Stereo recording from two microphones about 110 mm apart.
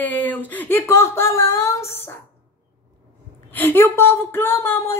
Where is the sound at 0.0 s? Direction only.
15° left (ahead or behind).